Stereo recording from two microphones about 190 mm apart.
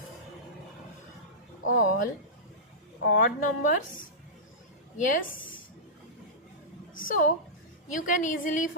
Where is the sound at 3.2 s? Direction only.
45° left (ahead or behind).